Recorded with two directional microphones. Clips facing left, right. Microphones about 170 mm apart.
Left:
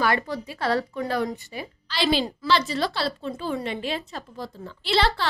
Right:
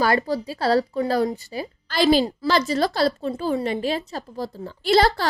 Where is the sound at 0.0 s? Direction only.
35° right (ahead or behind).